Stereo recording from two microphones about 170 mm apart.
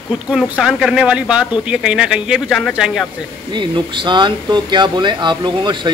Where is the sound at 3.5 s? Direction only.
30° right (ahead or behind).